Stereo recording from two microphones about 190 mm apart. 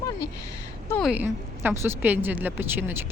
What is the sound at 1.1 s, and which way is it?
A woman's voice, 10° right (ahead or behind).